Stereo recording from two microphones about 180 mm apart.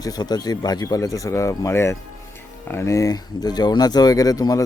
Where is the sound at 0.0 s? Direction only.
20° left (ahead or behind).